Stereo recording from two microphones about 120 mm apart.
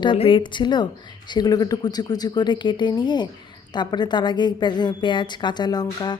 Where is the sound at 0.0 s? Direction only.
45° left (ahead or behind).